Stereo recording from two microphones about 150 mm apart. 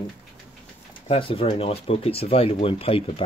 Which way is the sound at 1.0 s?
40° left (ahead or behind).